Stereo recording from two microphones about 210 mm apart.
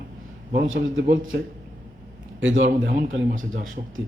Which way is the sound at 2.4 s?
60° right (ahead or behind).